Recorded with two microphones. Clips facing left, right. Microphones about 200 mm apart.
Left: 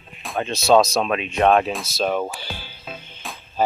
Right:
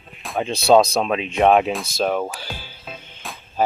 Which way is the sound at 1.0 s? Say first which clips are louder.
Right 1 dB; 15° right (ahead or behind).